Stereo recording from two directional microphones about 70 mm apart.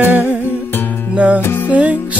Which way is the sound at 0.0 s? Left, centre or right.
Right.